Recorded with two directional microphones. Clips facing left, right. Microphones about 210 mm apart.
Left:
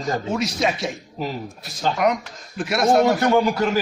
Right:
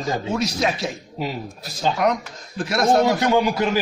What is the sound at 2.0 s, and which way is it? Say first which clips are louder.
A man's voice: even; centre (ahead or behind).